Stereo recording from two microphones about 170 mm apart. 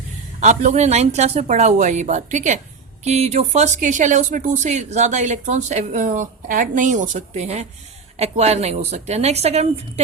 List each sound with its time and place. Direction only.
0.3 s a woman's voice: 45° right (ahead or behind)